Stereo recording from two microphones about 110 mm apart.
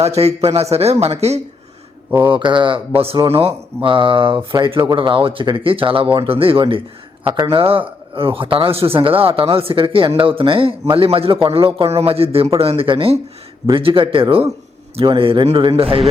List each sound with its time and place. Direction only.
0.0 s speech: 75° right (ahead or behind)
2.0 s speech: 20° right (ahead or behind)
2.3 s speech: 45° right (ahead or behind)